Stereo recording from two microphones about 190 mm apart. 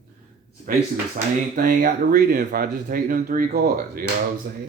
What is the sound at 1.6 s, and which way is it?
Speech, 45° right (ahead or behind).